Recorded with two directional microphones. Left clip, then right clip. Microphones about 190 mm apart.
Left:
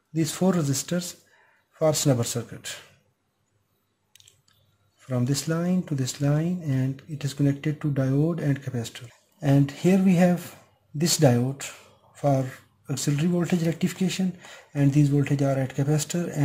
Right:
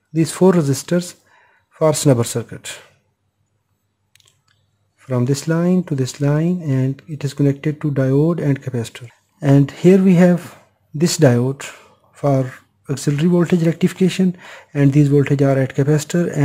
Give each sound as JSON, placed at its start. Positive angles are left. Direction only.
{"t": 0.1, "sound": "speech", "side_deg": -45}
{"t": 5.0, "sound": "speech", "side_deg": -45}
{"t": 8.1, "sound": "speech", "side_deg": -30}
{"t": 8.4, "sound": "speech", "side_deg": -45}
{"t": 11.5, "sound": "a sound", "side_deg": -45}
{"t": 12.4, "sound": "speech", "side_deg": -45}